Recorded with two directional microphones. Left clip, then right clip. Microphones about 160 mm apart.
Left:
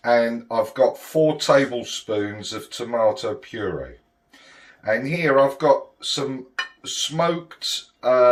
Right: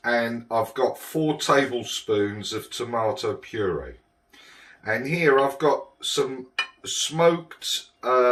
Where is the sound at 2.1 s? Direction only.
45° left (ahead or behind).